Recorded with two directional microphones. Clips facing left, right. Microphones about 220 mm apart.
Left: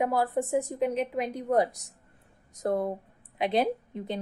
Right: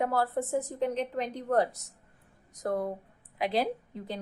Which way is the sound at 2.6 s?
25° left (ahead or behind).